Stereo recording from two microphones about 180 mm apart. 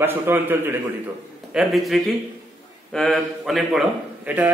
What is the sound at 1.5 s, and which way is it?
A man's voice, centre (ahead or behind).